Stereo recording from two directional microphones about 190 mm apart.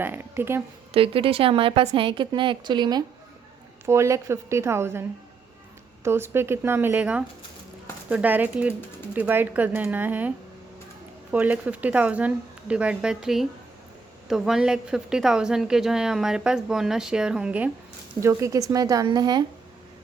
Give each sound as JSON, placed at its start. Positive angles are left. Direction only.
{"t": 0.0, "sound": "speech", "side_deg": -10}
{"t": 0.9, "sound": "a woman's voice", "side_deg": -30}
{"t": 6.1, "sound": "a woman's voice", "side_deg": -15}